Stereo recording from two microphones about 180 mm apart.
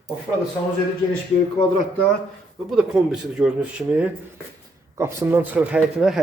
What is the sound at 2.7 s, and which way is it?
A man's voice, 5° right (ahead or behind).